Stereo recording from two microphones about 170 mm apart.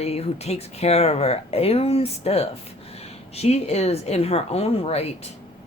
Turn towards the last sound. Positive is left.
turn(degrees=35)  # may be behind; listen again after turning